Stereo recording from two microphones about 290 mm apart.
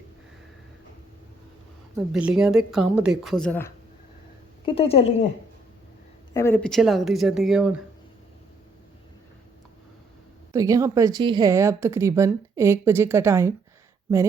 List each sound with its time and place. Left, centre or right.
2.0 s speech: centre
4.6 s a woman's voice: centre
6.3 s speech: centre
10.5 s speech: centre